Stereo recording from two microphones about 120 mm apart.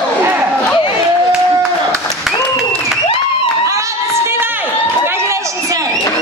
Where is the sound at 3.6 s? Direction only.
25° right (ahead or behind).